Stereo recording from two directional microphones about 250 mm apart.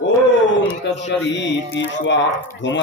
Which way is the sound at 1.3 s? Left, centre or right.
Left.